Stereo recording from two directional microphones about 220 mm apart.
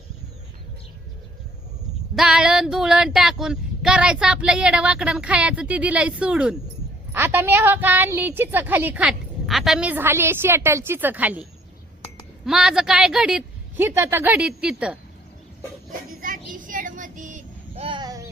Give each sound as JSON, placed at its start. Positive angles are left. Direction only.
{"t": 2.1, "sound": "child singing", "side_deg": -5}
{"t": 7.1, "sound": "a woman's voice", "side_deg": -10}
{"t": 12.5, "sound": "child singing", "side_deg": 0}
{"t": 16.2, "sound": "child singing", "side_deg": -35}